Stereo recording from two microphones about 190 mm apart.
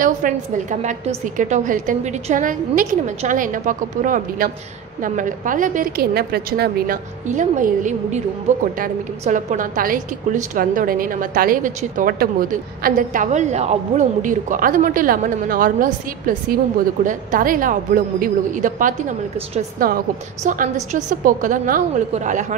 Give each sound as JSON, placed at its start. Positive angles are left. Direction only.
{"t": 0.0, "sound": "a woman's voice", "side_deg": -45}
{"t": 7.2, "sound": "a woman's voice", "side_deg": -40}